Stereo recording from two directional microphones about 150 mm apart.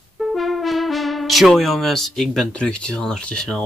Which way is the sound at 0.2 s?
Centre (ahead or behind).